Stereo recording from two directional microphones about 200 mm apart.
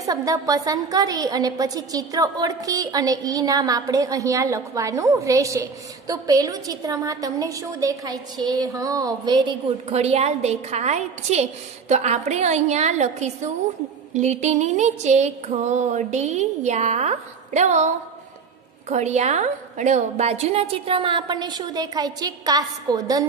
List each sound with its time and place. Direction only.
0.0 s a woman's voice: 20° right (ahead or behind); by 11.4 s 35° right (ahead or behind)
11.9 s a sound: 35° right (ahead or behind)
18.9 s a woman's voice: 35° right (ahead or behind); by 23.2 s 20° right (ahead or behind)